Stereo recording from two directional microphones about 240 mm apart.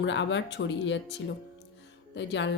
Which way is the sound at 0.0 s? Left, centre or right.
Left.